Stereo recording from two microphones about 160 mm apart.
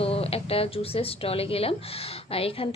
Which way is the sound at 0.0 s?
35° left (ahead or behind).